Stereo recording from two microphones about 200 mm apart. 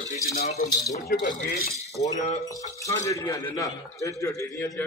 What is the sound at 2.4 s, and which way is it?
A man's voice, 15° left (ahead or behind).